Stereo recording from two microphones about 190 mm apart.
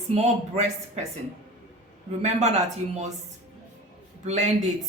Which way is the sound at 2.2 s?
35° right (ahead or behind).